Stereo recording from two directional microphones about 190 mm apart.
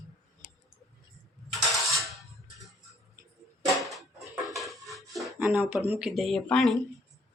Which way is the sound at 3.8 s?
Centre (ahead or behind).